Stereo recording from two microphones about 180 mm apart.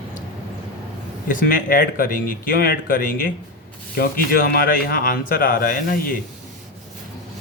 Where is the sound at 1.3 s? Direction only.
50° left (ahead or behind).